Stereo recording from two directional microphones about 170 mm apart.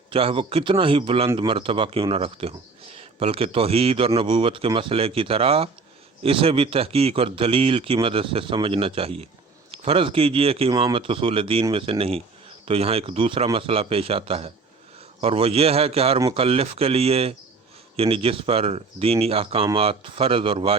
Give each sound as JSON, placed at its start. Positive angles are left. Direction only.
{"t": 0.1, "sound": "a man's voice", "side_deg": -30}